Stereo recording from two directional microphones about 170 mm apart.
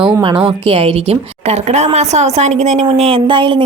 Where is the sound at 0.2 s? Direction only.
30° right (ahead or behind).